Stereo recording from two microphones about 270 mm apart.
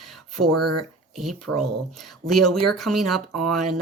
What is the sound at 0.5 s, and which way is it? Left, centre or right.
Speech, right.